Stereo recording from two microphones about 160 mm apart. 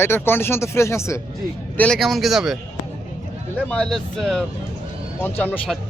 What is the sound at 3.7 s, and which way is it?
A man's voice, 5° left (ahead or behind).